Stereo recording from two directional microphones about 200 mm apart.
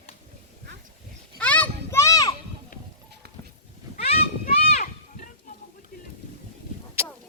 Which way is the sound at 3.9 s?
30° left (ahead or behind).